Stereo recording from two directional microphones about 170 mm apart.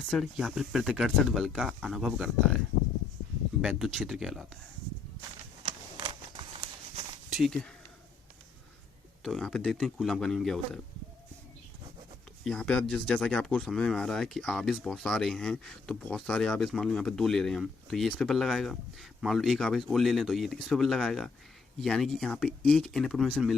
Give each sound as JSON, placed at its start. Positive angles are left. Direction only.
{"t": 0.0, "sound": "speech", "side_deg": 0}
{"t": 3.6, "sound": "speech", "side_deg": 0}
{"t": 5.6, "sound": "a sound", "side_deg": -25}
{"t": 7.3, "sound": "speech", "side_deg": 0}
{"t": 9.2, "sound": "speech", "side_deg": 0}
{"t": 12.5, "sound": "speech", "side_deg": 5}